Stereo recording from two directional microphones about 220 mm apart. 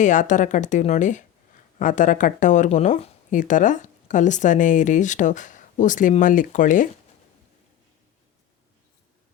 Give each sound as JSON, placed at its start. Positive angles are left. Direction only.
{"t": 0.0, "sound": "speech", "side_deg": 35}